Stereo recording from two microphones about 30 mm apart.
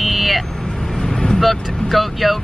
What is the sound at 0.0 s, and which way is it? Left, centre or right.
Vehicle, centre.